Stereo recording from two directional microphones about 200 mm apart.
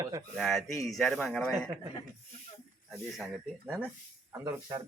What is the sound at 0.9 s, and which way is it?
Speech, centre (ahead or behind).